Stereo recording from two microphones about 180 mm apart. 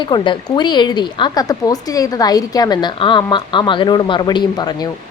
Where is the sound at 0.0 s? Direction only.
25° left (ahead or behind).